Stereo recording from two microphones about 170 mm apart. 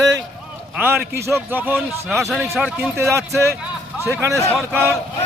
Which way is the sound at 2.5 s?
10° right (ahead or behind).